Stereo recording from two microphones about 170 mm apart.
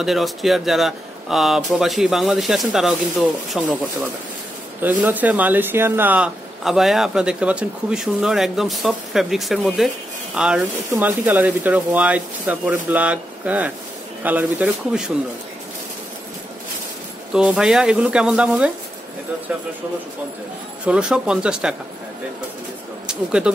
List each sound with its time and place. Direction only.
0.0 s speech: centre (ahead or behind)
4.8 s speech: 10° right (ahead or behind)
17.3 s speech: 5° right (ahead or behind)
20.8 s speech: 5° right (ahead or behind)
23.0 s speech: 5° right (ahead or behind)